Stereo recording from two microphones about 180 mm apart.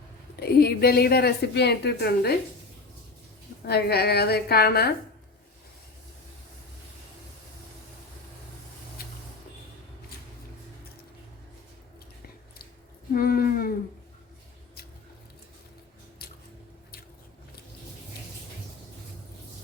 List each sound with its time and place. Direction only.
0.3 s speech: 60° left (ahead or behind)
3.7 s speech: 60° left (ahead or behind)
13.1 s speech: 55° left (ahead or behind)